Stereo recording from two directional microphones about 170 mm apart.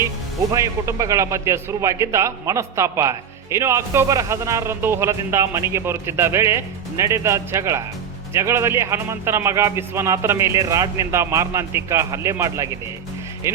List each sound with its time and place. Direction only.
0.5 s a man's voice: 20° right (ahead or behind)